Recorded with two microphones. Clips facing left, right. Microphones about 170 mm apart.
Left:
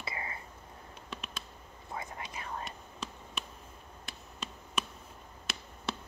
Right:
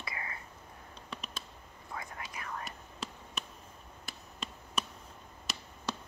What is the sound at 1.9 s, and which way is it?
Whispering, 25° left (ahead or behind).